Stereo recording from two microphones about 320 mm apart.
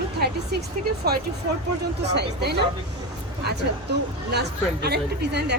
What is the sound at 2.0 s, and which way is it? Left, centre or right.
Speech, right.